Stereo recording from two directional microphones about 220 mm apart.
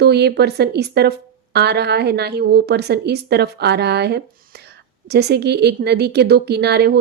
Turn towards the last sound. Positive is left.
turn(degrees=-50)  # may be behind; listen again after turning